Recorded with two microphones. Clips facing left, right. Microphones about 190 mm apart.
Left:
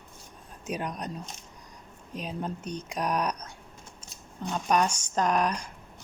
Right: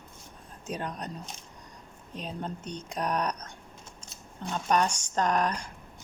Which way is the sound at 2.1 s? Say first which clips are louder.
Left 2 dB; 10° left (ahead or behind).